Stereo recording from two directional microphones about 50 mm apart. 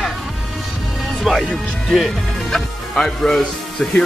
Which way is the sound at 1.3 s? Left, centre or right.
Centre.